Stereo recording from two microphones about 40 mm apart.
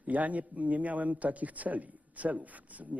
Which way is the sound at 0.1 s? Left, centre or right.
Right.